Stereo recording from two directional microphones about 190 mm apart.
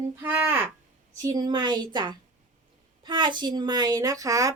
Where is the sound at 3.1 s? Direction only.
25° right (ahead or behind).